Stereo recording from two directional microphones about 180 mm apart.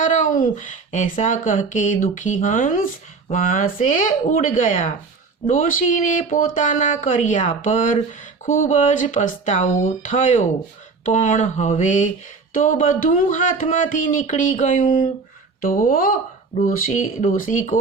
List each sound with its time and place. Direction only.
0.0 s speech: 45° left (ahead or behind)